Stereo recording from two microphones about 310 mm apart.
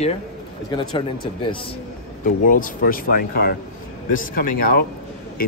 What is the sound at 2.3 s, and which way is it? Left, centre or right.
Speech, left.